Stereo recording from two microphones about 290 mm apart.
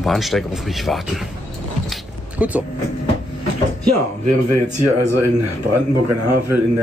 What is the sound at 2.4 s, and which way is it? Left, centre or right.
Speech, centre.